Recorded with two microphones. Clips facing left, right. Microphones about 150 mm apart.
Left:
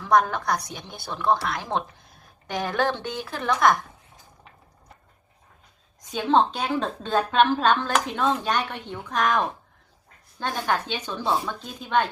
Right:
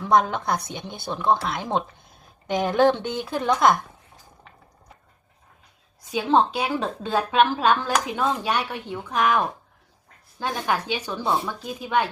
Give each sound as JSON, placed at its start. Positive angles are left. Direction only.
{"t": 0.0, "sound": "speech", "side_deg": -20}
{"t": 6.1, "sound": "a woman's voice", "side_deg": -10}
{"t": 10.4, "sound": "a woman's voice", "side_deg": -10}